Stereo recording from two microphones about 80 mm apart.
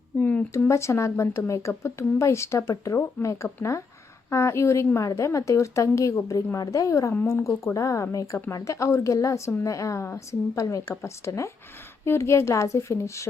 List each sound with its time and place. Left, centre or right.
0.2 s speech: centre
0.7 s speech: left